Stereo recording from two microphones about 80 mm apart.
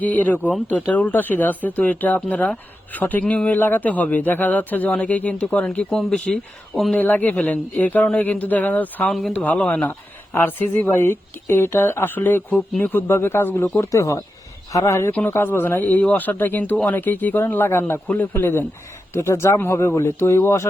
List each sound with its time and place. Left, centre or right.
0.0 s speech: left
5.9 s speech: centre
6.9 s speech: centre
9.0 s speech: centre
9.4 s speech: centre
11.0 s speech: left
13.9 s speech: left